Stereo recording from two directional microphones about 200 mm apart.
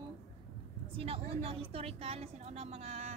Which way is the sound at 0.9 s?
30° right (ahead or behind).